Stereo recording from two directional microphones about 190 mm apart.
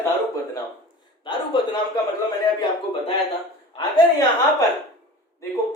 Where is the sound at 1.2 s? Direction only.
25° left (ahead or behind).